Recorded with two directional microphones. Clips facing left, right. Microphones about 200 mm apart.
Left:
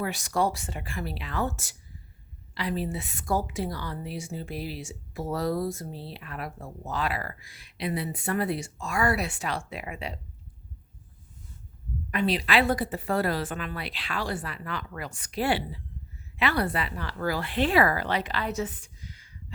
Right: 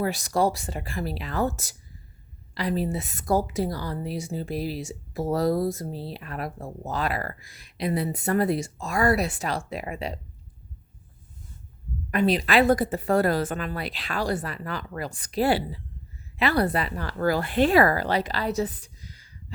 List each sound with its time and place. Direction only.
0.0 s a woman's voice: 35° right (ahead or behind)
12.1 s a woman's voice: 45° right (ahead or behind)